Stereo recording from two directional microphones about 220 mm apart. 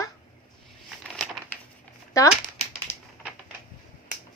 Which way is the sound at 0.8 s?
Centre (ahead or behind).